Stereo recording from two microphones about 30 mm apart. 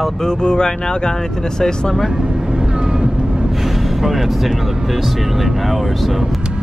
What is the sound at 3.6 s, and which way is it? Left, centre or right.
Speech, centre.